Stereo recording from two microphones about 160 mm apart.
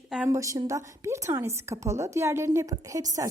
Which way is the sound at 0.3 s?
20° right (ahead or behind).